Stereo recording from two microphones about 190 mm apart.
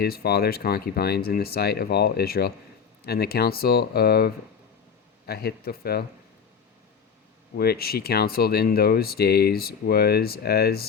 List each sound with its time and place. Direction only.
0.0 s speech: 55° left (ahead or behind)
7.5 s speech: 55° left (ahead or behind)